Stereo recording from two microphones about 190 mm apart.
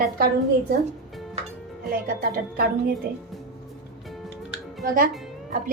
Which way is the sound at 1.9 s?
50° right (ahead or behind).